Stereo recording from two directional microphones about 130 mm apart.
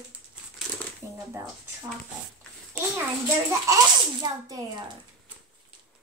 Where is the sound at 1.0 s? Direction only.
20° right (ahead or behind).